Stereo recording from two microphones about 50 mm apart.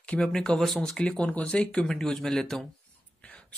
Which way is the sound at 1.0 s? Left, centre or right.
Left.